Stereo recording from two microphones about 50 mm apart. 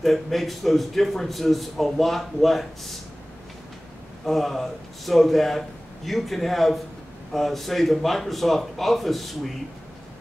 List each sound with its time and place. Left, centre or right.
0.0 s a man's voice: centre
4.3 s a man's voice: centre